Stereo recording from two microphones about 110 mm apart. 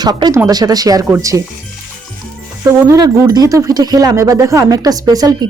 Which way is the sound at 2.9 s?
35° right (ahead or behind).